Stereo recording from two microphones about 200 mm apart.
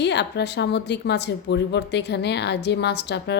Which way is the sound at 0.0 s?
60° left (ahead or behind).